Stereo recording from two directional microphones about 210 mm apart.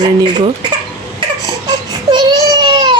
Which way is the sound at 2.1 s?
20° right (ahead or behind).